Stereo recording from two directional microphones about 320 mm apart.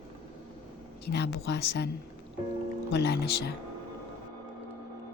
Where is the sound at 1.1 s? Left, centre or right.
Left.